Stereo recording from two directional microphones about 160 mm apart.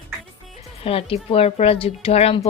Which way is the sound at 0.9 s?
35° left (ahead or behind).